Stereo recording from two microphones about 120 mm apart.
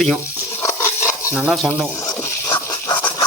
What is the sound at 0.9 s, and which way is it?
Stir, 20° left (ahead or behind).